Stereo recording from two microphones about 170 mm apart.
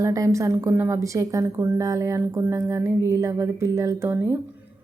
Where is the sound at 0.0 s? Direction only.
20° right (ahead or behind).